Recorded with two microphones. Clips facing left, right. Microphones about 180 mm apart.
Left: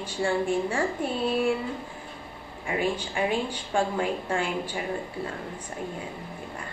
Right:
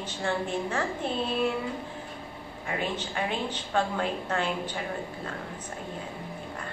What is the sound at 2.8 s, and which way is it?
A woman's voice, 10° left (ahead or behind).